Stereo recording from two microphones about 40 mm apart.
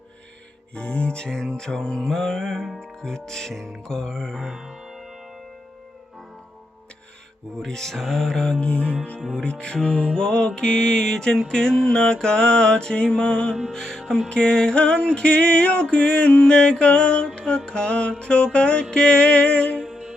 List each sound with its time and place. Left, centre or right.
0.7 s music: left
1.3 s music: centre
2.8 s music: centre
4.4 s music: centre
7.6 s music: centre
8.6 s music: left
19.9 s music: centre